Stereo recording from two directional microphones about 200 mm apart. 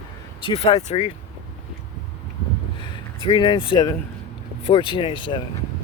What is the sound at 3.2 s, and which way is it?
Speech, 25° left (ahead or behind).